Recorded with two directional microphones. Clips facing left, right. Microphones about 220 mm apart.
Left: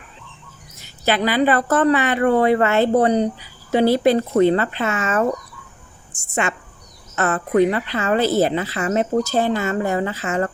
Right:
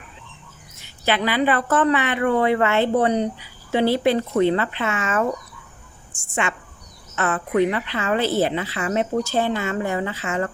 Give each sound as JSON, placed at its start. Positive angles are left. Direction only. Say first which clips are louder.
{"t": 0.8, "sound": "a woman's voice", "louder": "left 2 dB", "side_deg": 40}
{"t": 6.4, "sound": "a woman's voice", "louder": "left 2 dB", "side_deg": 40}